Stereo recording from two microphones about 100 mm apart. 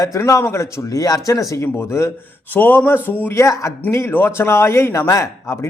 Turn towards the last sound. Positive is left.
turn(degrees=30)  # may be behind; listen again after turning